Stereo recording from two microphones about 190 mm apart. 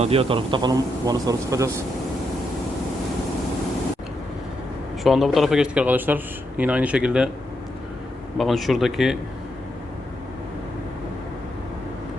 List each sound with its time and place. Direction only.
0.0 s a man's voice: 30° right (ahead or behind); by 1.8 s 15° right (ahead or behind)
5.0 s speech: centre (ahead or behind)
8.4 s speech: centre (ahead or behind)